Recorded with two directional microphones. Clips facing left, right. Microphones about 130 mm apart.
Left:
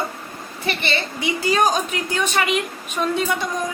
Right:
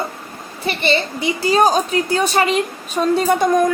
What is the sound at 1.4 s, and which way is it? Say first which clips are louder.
A woman's voice: right 5 dB; 35° right (ahead or behind).